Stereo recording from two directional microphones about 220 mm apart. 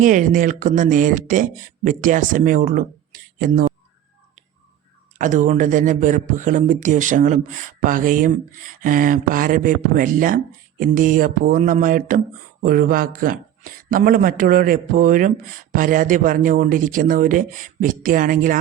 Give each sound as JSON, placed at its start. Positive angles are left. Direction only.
{"t": 0.0, "sound": "speech", "side_deg": -35}
{"t": 5.1, "sound": "speech", "side_deg": -35}